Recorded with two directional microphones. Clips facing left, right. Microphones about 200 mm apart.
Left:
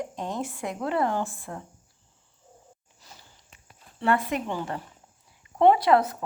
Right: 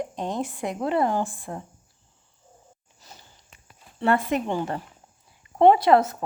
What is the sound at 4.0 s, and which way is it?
Speech, 25° right (ahead or behind).